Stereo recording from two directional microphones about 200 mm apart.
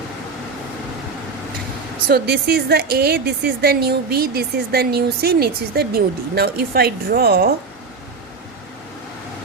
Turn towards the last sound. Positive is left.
turn(degrees=-50)  # may be behind; listen again after turning